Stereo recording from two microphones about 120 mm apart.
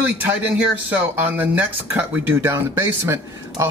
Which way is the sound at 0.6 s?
15° right (ahead or behind).